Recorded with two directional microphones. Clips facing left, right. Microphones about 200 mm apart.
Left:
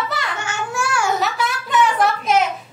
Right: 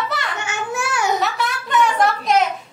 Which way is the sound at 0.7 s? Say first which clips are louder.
Even; 20° right (ahead or behind).